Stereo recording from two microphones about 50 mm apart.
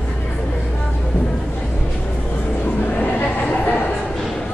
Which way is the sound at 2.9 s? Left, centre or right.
Left.